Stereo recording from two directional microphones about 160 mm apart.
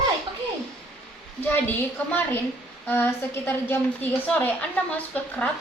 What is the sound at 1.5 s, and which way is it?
A woman's voice, 10° left (ahead or behind).